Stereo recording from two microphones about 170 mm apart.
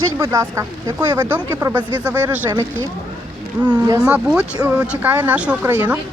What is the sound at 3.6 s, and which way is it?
Speech, 25° right (ahead or behind).